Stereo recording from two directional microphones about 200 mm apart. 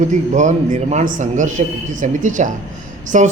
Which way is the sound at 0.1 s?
35° right (ahead or behind).